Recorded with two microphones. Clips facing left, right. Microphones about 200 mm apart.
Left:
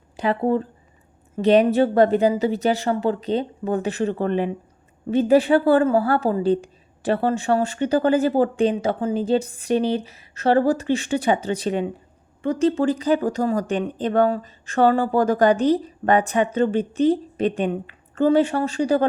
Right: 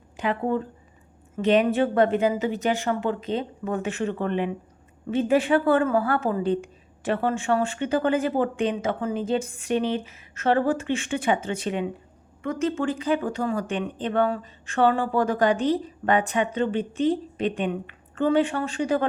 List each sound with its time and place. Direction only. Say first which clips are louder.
0.2 s a woman's voice: left 4 dB; 35° left (ahead or behind)